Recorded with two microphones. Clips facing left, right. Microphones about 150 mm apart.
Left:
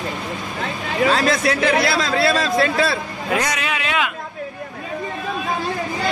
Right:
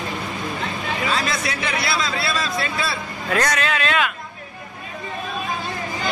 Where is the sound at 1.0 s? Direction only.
45° left (ahead or behind).